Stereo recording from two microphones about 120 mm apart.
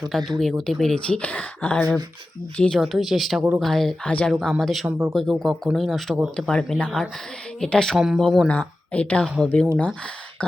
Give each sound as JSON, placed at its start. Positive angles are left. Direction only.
{"t": 0.3, "sound": "speech", "side_deg": 0}
{"t": 4.9, "sound": "speech", "side_deg": -15}
{"t": 5.1, "sound": "speech", "side_deg": 0}